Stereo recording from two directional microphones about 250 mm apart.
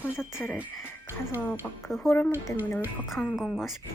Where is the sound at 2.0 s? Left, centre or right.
Centre.